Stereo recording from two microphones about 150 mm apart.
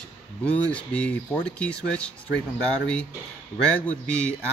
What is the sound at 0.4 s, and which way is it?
Speech, 10° left (ahead or behind).